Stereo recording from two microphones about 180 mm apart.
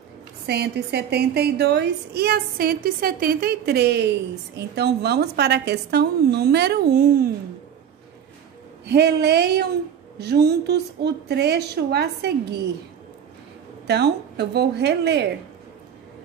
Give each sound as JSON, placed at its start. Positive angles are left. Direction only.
{"t": 0.5, "sound": "a woman's voice", "side_deg": -65}
{"t": 8.8, "sound": "a woman's voice", "side_deg": -65}
{"t": 13.8, "sound": "a woman's voice", "side_deg": -65}